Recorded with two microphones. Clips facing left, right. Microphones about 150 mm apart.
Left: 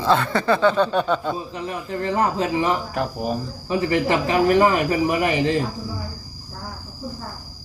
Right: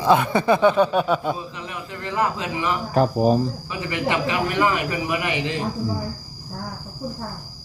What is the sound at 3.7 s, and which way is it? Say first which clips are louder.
Speech: left 5 dB; 40° left (ahead or behind).